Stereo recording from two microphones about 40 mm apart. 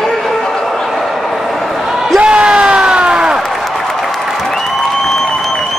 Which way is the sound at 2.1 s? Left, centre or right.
Right.